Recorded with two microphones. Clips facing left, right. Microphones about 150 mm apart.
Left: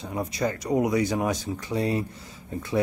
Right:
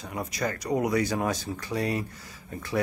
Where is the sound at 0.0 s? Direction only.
25° left (ahead or behind).